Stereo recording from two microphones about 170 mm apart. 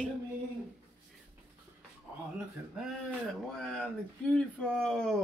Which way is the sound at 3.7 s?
5° left (ahead or behind).